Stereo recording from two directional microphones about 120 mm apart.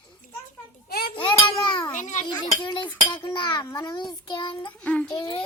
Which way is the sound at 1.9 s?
90° left.